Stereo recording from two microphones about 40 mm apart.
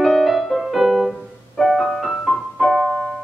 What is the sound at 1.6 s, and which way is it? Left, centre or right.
Music, centre.